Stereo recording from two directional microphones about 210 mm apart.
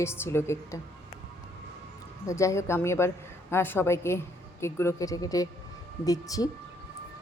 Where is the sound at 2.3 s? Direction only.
15° left (ahead or behind).